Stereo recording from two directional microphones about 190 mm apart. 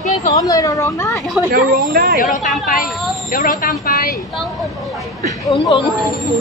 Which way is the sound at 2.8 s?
Centre (ahead or behind).